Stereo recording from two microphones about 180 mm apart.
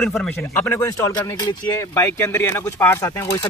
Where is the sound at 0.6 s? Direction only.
15° left (ahead or behind).